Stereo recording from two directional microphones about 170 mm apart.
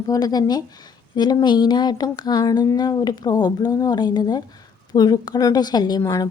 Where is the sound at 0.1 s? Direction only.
20° left (ahead or behind).